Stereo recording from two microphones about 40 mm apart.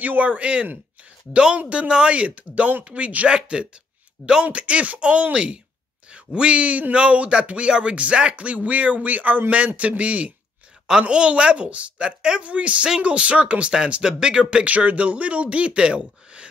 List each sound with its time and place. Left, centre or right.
0.0 s a woman's voice: right
3.3 s a woman's voice: right
12.8 s a woman's voice: right
13.1 s a woman's voice: right
14.6 s speech: right